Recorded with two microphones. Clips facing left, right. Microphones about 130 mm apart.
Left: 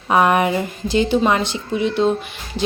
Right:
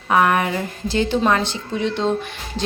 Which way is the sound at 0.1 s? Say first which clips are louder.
Left 2 dB; 20° left (ahead or behind).